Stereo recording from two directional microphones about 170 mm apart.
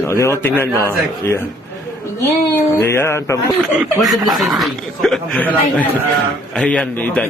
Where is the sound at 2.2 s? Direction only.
15° left (ahead or behind).